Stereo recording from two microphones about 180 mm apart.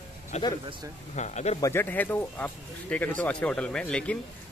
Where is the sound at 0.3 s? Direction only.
35° left (ahead or behind).